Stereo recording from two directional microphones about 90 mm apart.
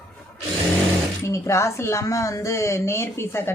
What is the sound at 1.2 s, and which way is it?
Speech, 35° left (ahead or behind).